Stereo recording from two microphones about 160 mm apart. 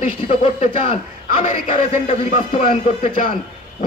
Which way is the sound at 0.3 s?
40° left (ahead or behind).